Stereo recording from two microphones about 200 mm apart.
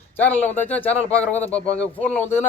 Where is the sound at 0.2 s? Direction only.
10° left (ahead or behind).